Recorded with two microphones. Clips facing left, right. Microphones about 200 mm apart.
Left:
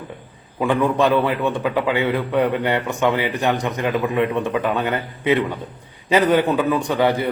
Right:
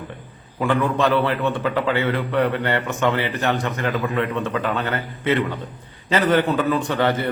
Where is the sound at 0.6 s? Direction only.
15° left (ahead or behind).